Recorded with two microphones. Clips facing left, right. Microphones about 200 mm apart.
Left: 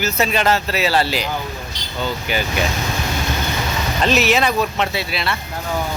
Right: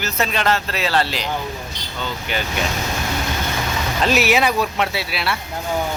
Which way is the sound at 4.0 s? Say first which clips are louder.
Even; 10° right (ahead or behind).